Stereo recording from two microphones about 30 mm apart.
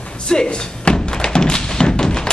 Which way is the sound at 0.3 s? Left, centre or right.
Left.